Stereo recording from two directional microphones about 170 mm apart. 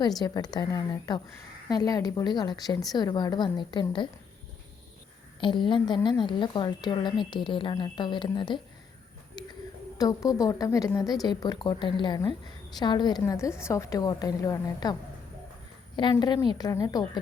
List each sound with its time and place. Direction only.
0.2 s speech: 20° left (ahead or behind)
5.4 s speech: 30° left (ahead or behind)
9.4 s a sound: 25° left (ahead or behind)
10.0 s speech: 20° left (ahead or behind)
16.0 s speech: 25° left (ahead or behind)